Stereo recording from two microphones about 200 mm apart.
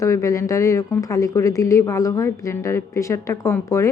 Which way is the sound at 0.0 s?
15° left (ahead or behind).